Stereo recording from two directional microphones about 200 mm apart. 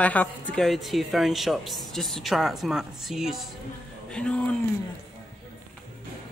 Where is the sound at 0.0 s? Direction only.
5° left (ahead or behind).